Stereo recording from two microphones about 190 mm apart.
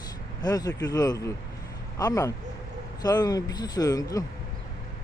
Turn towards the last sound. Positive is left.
turn(degrees=20)  # may be behind; listen again after turning